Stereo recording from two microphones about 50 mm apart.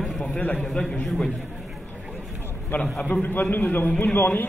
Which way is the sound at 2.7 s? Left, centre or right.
Left.